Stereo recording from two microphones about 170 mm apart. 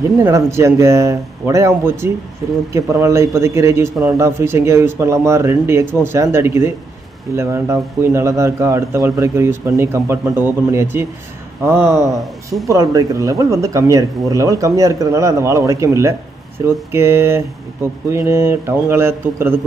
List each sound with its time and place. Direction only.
0.2 s speech: 15° right (ahead or behind)